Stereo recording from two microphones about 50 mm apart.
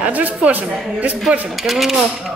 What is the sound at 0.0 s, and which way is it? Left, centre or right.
Speech, right.